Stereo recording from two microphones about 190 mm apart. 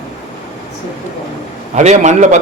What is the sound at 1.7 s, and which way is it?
Speech, 35° right (ahead or behind).